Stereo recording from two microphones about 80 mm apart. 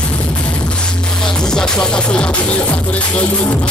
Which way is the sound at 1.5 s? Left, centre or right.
Centre.